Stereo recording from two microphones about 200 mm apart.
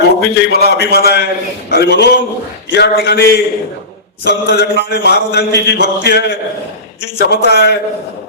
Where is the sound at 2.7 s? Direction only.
55° left (ahead or behind).